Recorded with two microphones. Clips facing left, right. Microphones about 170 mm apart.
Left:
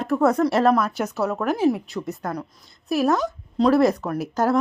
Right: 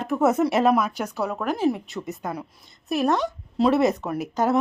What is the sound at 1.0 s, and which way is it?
Speech, 5° left (ahead or behind).